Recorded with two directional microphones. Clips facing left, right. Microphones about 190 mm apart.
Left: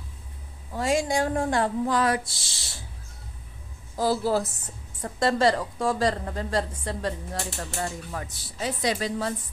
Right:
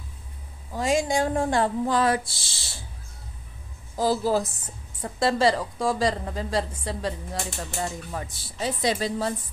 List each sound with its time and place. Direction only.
0.7 s speech: 20° right (ahead or behind)
3.9 s a woman's voice: 15° right (ahead or behind)
7.8 s speech: 20° right (ahead or behind)